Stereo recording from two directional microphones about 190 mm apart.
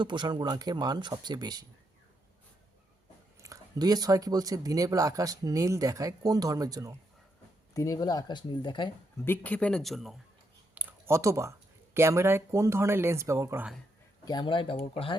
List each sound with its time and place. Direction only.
0.0 s speech: 25° right (ahead or behind)
3.4 s speech: 20° right (ahead or behind)
7.7 s speech: 20° left (ahead or behind)
9.2 s speech: 10° left (ahead or behind)
10.8 s a sound: 15° right (ahead or behind)
11.9 s speech: 15° right (ahead or behind)
14.3 s speech: 25° left (ahead or behind)